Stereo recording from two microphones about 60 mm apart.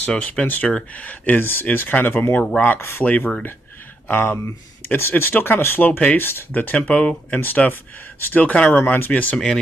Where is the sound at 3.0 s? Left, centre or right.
Left.